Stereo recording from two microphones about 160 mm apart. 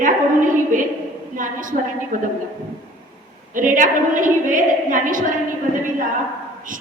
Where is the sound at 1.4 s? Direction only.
55° right (ahead or behind).